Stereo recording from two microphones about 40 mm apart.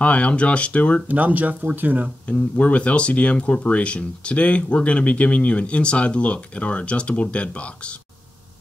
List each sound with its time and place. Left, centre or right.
0.0 s speech: left
1.0 s speech: right
2.2 s speech: left